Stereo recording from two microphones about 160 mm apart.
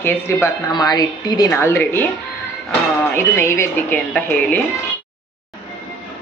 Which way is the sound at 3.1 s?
15° left (ahead or behind).